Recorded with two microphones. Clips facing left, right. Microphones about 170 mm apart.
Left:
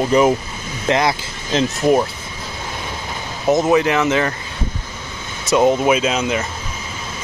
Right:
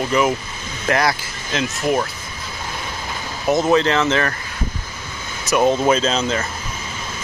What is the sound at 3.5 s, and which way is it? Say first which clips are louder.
Speech: left 1 dB; 15° left (ahead or behind).